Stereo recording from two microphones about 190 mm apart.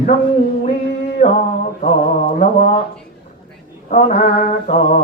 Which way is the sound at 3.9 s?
35° left (ahead or behind).